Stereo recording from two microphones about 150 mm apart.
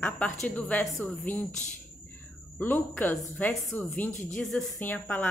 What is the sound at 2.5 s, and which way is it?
A woman's voice, 10° left (ahead or behind).